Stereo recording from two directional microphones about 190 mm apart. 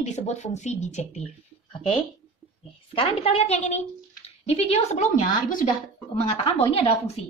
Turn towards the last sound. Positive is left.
turn(degrees=35)  # may be behind; listen again after turning